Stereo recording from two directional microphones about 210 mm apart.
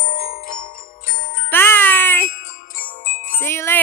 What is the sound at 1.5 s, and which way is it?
Music, 10° left (ahead or behind).